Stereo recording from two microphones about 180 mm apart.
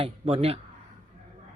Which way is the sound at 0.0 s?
30° right (ahead or behind).